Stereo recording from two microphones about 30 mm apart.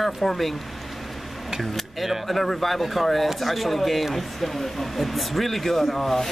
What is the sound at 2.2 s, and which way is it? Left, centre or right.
Speech, centre.